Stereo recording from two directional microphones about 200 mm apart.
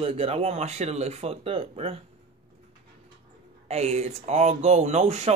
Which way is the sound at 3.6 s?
30° right (ahead or behind).